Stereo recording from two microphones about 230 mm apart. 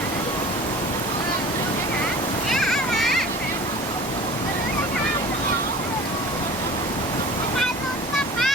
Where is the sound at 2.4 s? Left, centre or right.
Centre.